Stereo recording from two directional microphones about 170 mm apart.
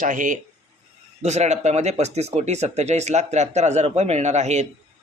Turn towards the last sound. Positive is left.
turn(degrees=-45)  # may be behind; listen again after turning